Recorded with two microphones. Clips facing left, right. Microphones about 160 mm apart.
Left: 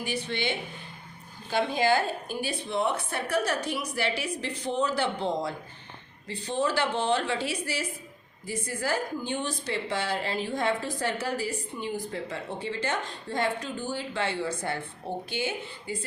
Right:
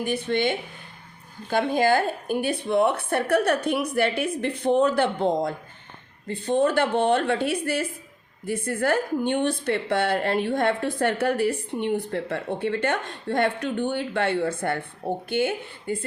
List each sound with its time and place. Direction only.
0.0 s a woman's voice: 50° right (ahead or behind)